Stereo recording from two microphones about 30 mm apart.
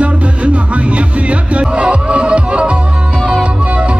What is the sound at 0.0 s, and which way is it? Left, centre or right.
Music, right.